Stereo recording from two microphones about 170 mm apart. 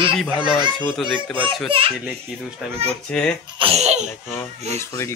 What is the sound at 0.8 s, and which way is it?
Speech, centre (ahead or behind).